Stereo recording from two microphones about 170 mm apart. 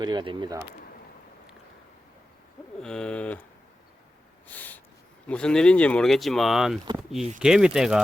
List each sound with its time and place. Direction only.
0.0 s speech: 25° right (ahead or behind)
2.8 s a sound: 5° left (ahead or behind)
4.4 s snort: 10° left (ahead or behind)
5.3 s speech: 5° left (ahead or behind)